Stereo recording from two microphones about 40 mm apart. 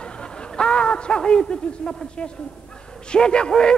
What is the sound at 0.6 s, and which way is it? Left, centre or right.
A man's voice, left.